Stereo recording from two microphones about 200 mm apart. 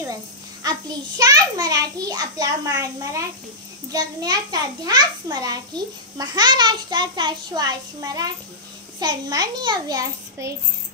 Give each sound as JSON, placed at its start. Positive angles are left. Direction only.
{"t": 0.7, "sound": "a child's voice", "side_deg": -20}